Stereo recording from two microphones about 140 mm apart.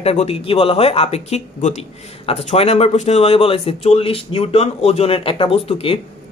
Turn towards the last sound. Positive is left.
turn(degrees=45)  # may be behind; listen again after turning